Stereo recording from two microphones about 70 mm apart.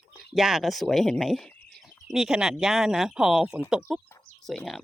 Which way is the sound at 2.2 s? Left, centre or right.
Centre.